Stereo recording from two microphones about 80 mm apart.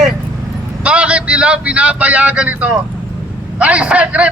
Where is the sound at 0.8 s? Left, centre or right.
Centre.